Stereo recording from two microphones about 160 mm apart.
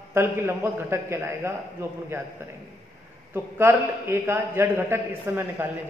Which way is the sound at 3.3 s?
15° right (ahead or behind).